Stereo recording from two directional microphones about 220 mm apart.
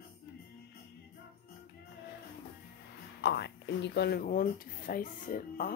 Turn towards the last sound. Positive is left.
turn(degrees=40)  # may be behind; listen again after turning